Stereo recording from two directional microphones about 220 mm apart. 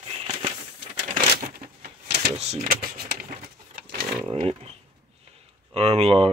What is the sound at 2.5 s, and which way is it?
Speech, 40° right (ahead or behind).